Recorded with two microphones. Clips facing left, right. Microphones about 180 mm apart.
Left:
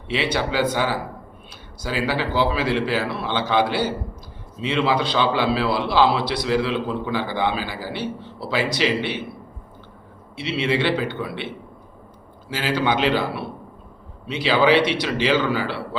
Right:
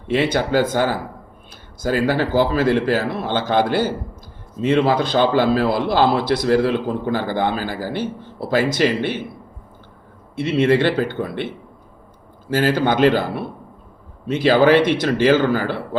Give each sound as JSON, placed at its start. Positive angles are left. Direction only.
{"t": 0.1, "sound": "a man's voice", "side_deg": -50}
{"t": 10.3, "sound": "a man's voice", "side_deg": -50}